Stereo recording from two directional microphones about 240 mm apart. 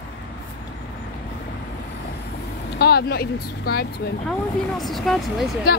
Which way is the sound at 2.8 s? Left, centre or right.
Left.